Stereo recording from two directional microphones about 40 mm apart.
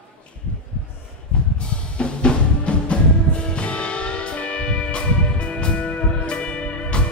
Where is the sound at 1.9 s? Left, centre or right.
Left.